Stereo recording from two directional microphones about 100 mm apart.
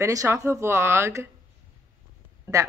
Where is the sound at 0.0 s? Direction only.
30° right (ahead or behind).